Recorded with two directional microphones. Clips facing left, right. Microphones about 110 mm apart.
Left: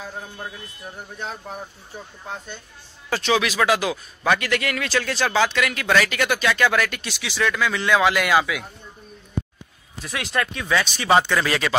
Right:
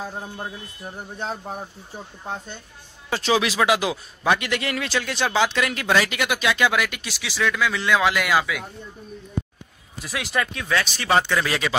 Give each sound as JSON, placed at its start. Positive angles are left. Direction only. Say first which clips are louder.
{"t": 0.8, "sound": "speech", "louder": "right 2 dB", "side_deg": -30}
{"t": 3.1, "sound": "a man's voice", "louder": "even", "side_deg": -30}
{"t": 10.0, "sound": "speech", "louder": "even", "side_deg": 0}